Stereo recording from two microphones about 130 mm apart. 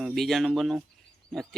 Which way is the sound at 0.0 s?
Centre (ahead or behind).